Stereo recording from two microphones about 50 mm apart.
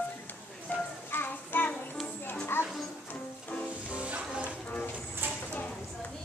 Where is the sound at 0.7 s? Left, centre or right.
Left.